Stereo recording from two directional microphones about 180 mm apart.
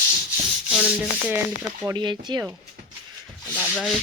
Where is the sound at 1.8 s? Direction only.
20° right (ahead or behind).